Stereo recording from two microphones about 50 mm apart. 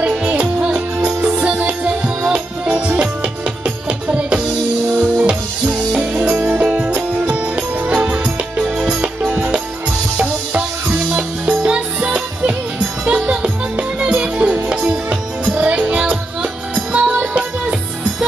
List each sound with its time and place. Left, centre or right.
0.0 s music: right
9.2 s music: right
11.6 s music: centre